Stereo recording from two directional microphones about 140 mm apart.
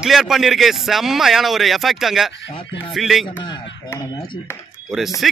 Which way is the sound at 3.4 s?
35° left (ahead or behind).